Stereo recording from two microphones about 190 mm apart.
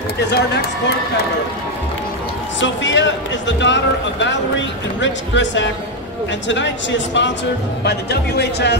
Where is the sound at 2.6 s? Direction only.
75° left (ahead or behind).